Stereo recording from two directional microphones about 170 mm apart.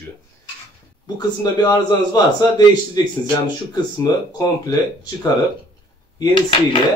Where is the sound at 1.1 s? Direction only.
25° left (ahead or behind).